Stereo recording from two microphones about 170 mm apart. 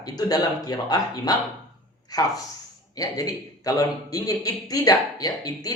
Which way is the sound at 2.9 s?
20° left (ahead or behind).